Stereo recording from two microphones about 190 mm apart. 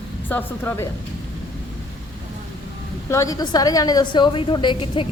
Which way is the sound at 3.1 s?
15° left (ahead or behind).